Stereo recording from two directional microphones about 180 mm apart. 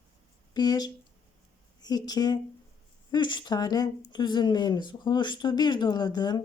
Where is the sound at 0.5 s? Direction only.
20° left (ahead or behind).